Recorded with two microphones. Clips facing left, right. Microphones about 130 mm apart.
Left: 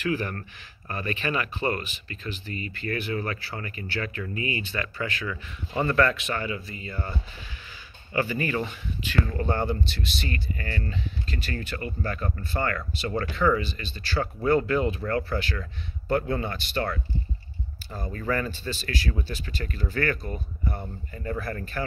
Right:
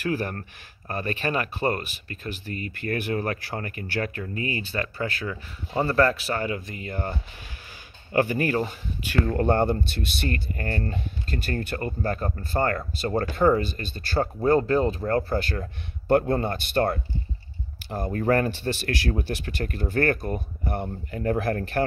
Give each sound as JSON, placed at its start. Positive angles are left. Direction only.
{"t": 0.0, "sound": "speech", "side_deg": -40}
{"t": 9.2, "sound": "speech", "side_deg": -55}
{"t": 14.2, "sound": "speech", "side_deg": -35}
{"t": 17.8, "sound": "speech", "side_deg": -60}